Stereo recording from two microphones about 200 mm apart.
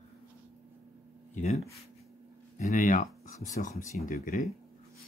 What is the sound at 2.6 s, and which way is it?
Speech, 35° left (ahead or behind).